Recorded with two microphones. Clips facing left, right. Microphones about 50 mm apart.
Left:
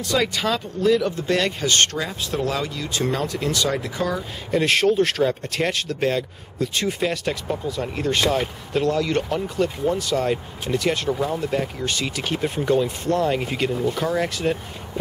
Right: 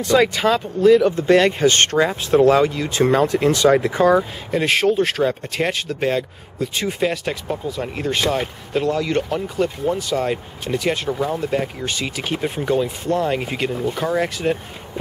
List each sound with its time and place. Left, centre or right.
0.0 s speech: right
4.5 s speech: centre